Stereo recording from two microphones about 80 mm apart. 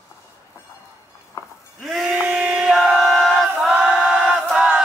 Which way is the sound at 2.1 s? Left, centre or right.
Centre.